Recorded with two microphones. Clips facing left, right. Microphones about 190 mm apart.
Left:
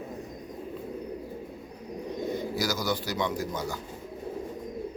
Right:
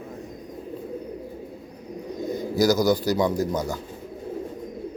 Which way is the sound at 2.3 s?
40° right (ahead or behind).